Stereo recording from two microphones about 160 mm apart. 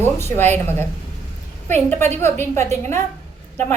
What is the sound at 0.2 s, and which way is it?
Speech, 15° left (ahead or behind).